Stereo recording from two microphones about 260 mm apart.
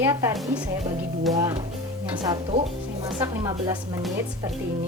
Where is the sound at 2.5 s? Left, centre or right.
Right.